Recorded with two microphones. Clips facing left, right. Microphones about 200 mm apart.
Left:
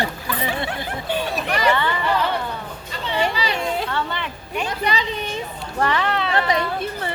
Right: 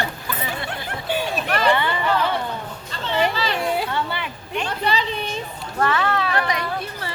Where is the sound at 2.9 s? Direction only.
10° left (ahead or behind).